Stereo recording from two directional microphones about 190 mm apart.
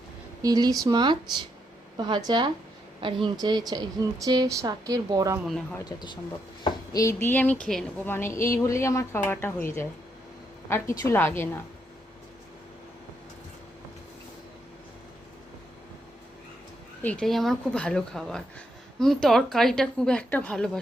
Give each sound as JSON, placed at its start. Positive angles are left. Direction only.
{"t": 0.4, "sound": "speech", "side_deg": -20}
{"t": 5.8, "sound": "speech", "side_deg": 20}
{"t": 17.0, "sound": "a woman's voice", "side_deg": 5}